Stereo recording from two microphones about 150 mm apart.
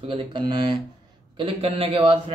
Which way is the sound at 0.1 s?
30° right (ahead or behind).